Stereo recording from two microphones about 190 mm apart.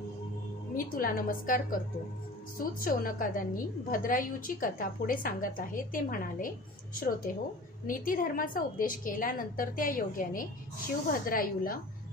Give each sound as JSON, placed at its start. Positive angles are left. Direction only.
{"t": 0.7, "sound": "a woman's voice", "side_deg": 50}